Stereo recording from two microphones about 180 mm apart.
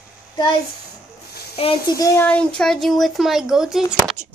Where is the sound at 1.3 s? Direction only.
60° left (ahead or behind).